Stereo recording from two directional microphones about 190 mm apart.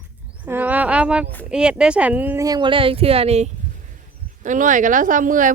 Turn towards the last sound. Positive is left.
turn(degrees=-45)  # may be behind; listen again after turning